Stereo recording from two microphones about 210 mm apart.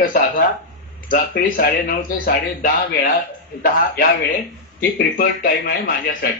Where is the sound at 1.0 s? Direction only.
50° left (ahead or behind).